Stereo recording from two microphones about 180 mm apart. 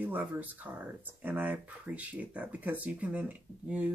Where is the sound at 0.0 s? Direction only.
10° right (ahead or behind).